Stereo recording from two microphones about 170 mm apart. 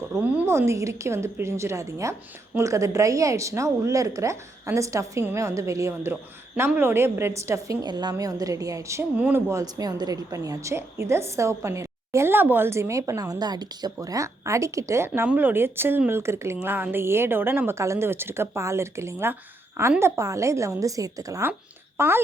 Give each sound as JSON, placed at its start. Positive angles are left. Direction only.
{"t": 0.1, "sound": "a woman's voice", "side_deg": -10}